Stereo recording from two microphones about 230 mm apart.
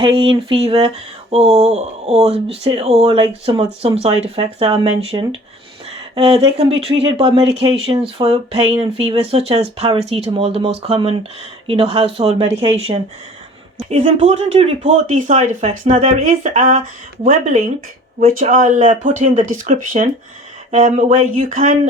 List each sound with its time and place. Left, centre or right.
0.0 s speech: right